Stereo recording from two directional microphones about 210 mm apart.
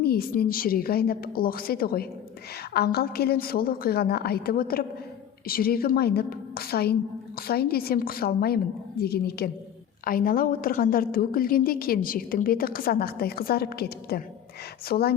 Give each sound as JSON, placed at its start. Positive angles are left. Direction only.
{"t": 0.0, "sound": "a woman's voice", "side_deg": 45}